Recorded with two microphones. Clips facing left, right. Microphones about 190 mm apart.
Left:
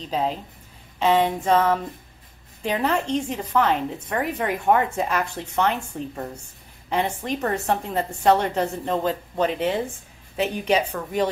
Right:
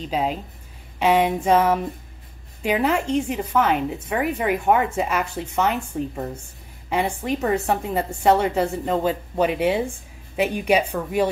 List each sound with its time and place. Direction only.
0.1 s speech: 10° right (ahead or behind)